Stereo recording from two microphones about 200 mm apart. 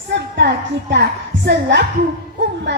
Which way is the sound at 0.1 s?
60° right (ahead or behind).